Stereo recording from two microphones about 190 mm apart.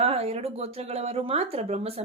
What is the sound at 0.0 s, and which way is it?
Speech, 30° right (ahead or behind).